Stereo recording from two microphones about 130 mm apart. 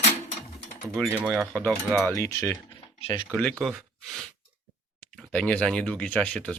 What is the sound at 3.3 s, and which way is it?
Speech, 5° left (ahead or behind).